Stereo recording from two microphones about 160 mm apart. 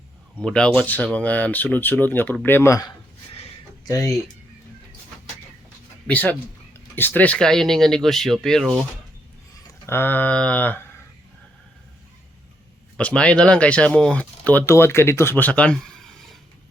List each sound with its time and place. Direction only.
0.4 s speech: 5° left (ahead or behind); by 4.1 s 20° left (ahead or behind)
6.1 s speech: 10° left (ahead or behind)
9.8 s speech: 15° left (ahead or behind)
13.0 s speech: 5° left (ahead or behind)